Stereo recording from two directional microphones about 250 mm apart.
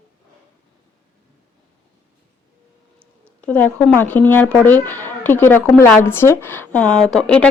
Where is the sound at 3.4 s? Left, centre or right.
Centre.